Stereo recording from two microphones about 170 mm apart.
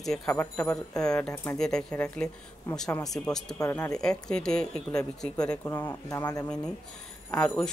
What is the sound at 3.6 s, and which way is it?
Speech, 15° left (ahead or behind).